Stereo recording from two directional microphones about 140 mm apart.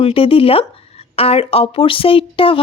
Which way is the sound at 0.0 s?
40° left (ahead or behind).